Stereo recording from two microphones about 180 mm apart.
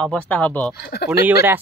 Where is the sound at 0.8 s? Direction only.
65° left (ahead or behind).